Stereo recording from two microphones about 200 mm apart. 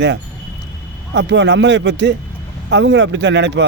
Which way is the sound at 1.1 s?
60° right (ahead or behind).